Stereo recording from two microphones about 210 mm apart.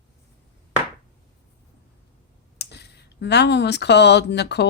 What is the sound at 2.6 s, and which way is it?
Speech, 50° left (ahead or behind).